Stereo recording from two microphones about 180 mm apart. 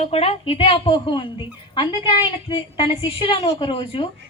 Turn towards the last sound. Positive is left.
turn(degrees=30)  # may be behind; listen again after turning